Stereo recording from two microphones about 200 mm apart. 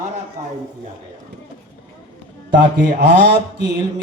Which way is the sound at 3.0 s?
60° right (ahead or behind).